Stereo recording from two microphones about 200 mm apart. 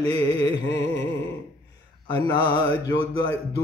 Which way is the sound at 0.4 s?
65° left (ahead or behind).